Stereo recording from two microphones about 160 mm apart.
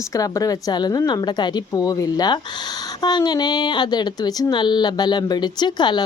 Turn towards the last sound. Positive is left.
turn(degrees=25)  # may be behind; listen again after turning